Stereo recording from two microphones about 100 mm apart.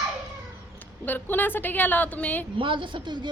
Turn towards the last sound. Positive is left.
turn(degrees=-50)  # may be behind; listen again after turning